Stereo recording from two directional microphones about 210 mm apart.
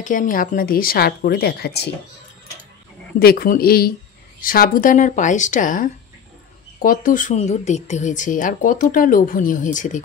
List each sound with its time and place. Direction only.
0.0 s a woman's voice: 40° left (ahead or behind)
3.2 s a woman's voice: 45° left (ahead or behind)